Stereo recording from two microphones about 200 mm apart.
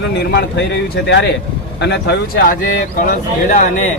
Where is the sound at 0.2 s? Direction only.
55° left (ahead or behind).